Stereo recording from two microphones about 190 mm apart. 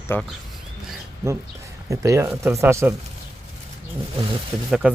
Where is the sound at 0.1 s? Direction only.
10° left (ahead or behind).